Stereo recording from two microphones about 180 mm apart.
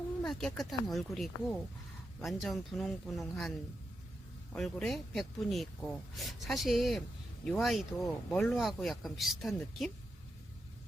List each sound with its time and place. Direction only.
0.2 s speech: 5° left (ahead or behind)
4.5 s speech: centre (ahead or behind)